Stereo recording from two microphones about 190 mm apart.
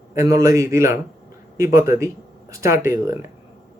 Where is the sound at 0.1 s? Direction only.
15° right (ahead or behind).